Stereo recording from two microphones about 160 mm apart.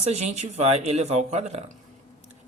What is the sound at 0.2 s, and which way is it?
Speech, 45° right (ahead or behind).